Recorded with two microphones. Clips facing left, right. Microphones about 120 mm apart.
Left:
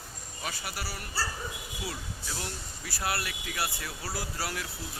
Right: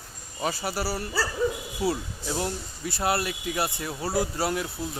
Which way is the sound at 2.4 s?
25° right (ahead or behind).